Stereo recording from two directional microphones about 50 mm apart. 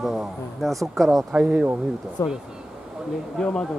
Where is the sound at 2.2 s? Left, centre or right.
Left.